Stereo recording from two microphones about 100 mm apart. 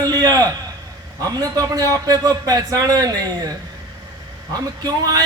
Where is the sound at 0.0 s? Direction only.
40° right (ahead or behind).